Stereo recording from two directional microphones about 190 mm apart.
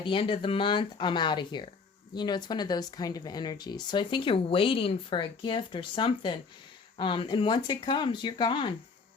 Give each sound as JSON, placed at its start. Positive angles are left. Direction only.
{"t": 0.0, "sound": "speech", "side_deg": 25}